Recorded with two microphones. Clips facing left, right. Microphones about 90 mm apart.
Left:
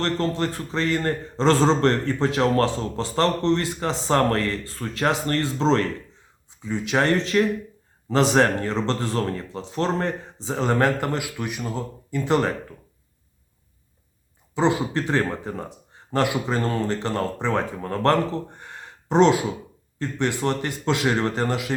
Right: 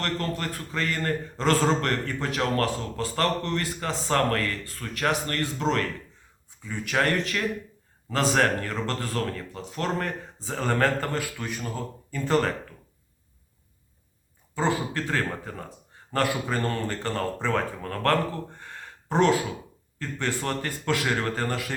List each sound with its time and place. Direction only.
0.0 s speech: 25° left (ahead or behind)
14.5 s speech: 20° left (ahead or behind)